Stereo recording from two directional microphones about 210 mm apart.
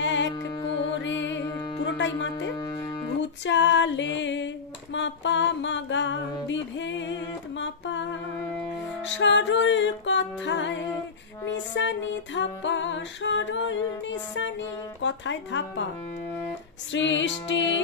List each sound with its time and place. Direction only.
0.0 s music: 60° left (ahead or behind)
0.3 s music: 20° left (ahead or behind)
1.0 s music: 60° left (ahead or behind)
1.4 s music: 20° left (ahead or behind)
1.9 s music: 60° left (ahead or behind)
2.5 s music: 20° left (ahead or behind)
3.2 s music: 60° left (ahead or behind)
6.4 s a sound: 60° left (ahead or behind)
9.0 s music: 60° left (ahead or behind)
16.9 s music: 60° left (ahead or behind)